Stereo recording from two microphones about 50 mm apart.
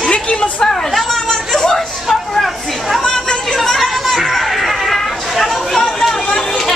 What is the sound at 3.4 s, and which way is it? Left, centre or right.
Music, centre.